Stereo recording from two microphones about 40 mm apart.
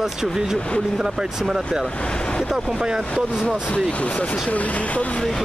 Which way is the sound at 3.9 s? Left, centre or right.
Left.